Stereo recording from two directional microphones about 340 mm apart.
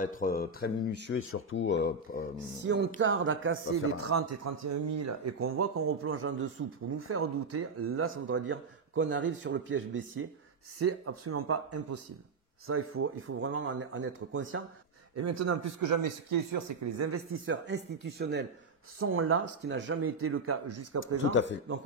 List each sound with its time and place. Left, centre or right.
0.0 s speech: left
2.6 s speech: right
15.1 s speech: right
17.0 s speech: right
18.9 s speech: right
21.3 s speech: left